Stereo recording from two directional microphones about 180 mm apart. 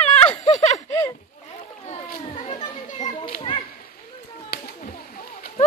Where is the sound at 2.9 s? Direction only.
50° left (ahead or behind).